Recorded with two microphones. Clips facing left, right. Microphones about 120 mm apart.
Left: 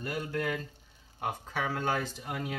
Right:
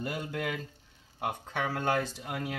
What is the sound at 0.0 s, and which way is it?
Speech, 15° right (ahead or behind).